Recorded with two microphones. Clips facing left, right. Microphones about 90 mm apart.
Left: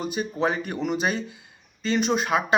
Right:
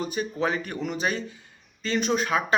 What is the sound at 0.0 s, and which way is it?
A man's voice, 10° left (ahead or behind).